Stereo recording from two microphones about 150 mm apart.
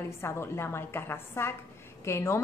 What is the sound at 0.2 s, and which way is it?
A woman's voice, 15° left (ahead or behind).